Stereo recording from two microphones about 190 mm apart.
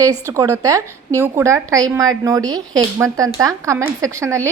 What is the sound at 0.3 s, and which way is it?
A woman's voice, 15° right (ahead or behind).